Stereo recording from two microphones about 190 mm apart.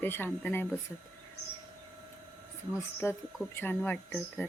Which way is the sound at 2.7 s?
15° left (ahead or behind).